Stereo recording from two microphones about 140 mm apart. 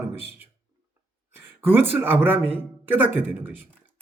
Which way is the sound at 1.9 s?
10° right (ahead or behind).